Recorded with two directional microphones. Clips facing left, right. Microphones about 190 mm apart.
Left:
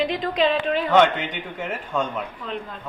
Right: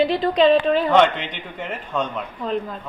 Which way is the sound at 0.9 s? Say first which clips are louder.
Right 1 dB; 5° left (ahead or behind).